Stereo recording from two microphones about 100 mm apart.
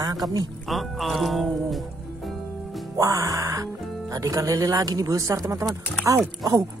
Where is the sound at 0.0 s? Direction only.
40° right (ahead or behind).